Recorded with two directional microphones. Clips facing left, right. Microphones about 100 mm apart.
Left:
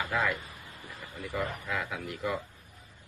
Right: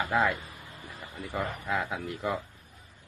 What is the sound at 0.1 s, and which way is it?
A man's voice, 30° right (ahead or behind).